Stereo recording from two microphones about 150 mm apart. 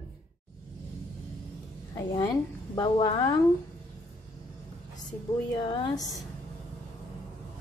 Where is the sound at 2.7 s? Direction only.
25° left (ahead or behind).